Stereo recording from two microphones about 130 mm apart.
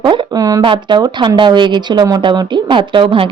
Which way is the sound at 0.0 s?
40° right (ahead or behind).